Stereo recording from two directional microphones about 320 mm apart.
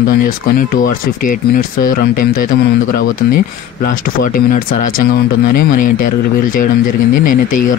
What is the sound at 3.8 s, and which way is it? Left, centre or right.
Speech, left.